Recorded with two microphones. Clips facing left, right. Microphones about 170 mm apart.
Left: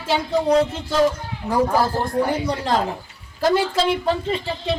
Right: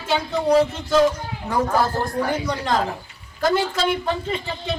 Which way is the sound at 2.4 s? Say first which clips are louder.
Left 1 dB; 30° left (ahead or behind).